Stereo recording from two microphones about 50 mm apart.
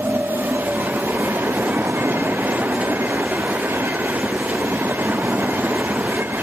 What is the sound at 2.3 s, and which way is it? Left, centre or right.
Train, right.